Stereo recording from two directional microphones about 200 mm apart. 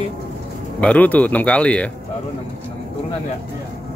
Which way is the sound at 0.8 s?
5° left (ahead or behind).